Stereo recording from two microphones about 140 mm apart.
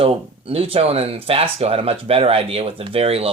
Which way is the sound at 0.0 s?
45° right (ahead or behind).